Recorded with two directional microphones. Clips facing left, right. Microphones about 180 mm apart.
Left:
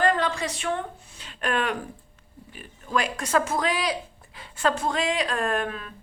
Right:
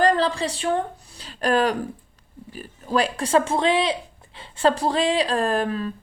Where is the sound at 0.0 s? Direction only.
35° right (ahead or behind).